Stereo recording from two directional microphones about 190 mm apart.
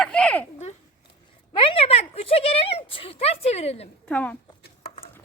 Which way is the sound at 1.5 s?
30° left (ahead or behind).